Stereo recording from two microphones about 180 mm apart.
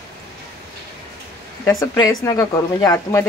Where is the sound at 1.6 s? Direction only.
15° left (ahead or behind).